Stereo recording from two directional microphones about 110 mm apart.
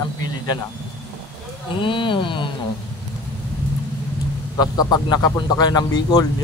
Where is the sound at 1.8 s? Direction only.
50° left (ahead or behind).